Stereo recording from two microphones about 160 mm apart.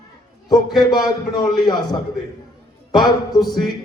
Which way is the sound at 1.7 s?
25° left (ahead or behind).